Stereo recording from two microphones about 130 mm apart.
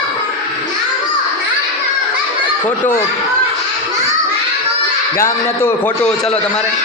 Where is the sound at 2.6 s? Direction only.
75° left (ahead or behind).